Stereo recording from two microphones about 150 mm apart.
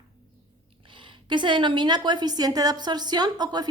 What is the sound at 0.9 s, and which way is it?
A woman's voice, 35° right (ahead or behind).